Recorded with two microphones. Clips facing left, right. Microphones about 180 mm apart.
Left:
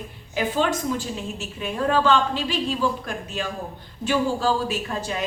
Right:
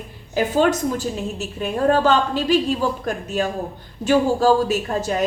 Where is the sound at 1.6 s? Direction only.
45° right (ahead or behind).